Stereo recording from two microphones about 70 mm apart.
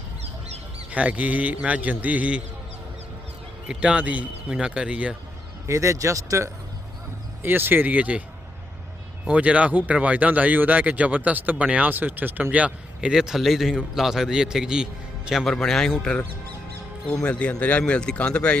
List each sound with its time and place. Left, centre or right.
0.9 s speech: centre
3.7 s a man's voice: centre
5.6 s speech: right
7.4 s speech: right
9.2 s a man's voice: centre
15.5 s a man's voice: centre
17.2 s a man's voice: centre